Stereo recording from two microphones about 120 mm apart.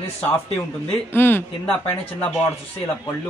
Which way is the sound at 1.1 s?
15° left (ahead or behind).